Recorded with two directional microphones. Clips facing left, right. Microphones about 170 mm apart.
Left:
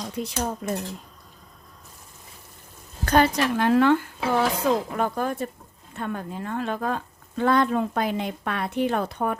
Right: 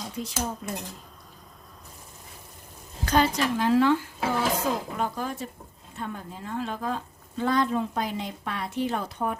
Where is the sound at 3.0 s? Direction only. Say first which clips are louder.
Left 3 dB; 55° left (ahead or behind).